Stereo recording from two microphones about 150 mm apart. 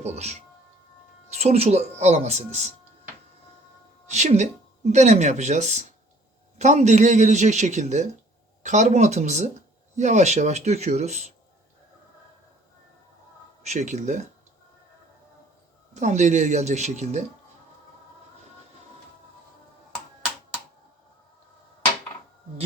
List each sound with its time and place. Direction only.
0.0 s speech: 45° right (ahead or behind)
4.1 s speech: 50° right (ahead or behind)
13.6 s speech: 50° right (ahead or behind)
16.0 s speech: 55° right (ahead or behind)